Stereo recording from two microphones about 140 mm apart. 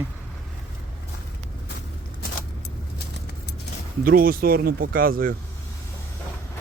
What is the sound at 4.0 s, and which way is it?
Speech, 90° right.